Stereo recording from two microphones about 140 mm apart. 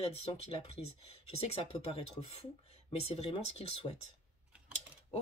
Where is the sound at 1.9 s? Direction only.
45° left (ahead or behind).